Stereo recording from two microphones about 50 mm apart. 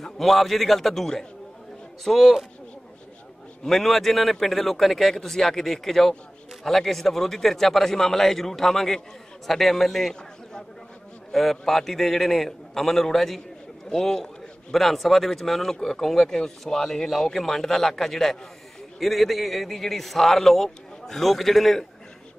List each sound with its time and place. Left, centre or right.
0.0 s a man's voice: centre
3.6 s a man's voice: centre